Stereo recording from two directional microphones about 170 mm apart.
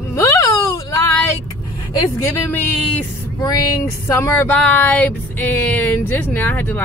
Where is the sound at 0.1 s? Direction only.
20° left (ahead or behind).